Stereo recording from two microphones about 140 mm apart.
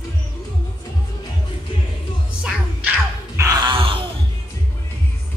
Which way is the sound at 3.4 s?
30° right (ahead or behind).